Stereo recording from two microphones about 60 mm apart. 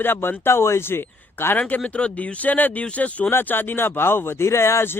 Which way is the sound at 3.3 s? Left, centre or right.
Left.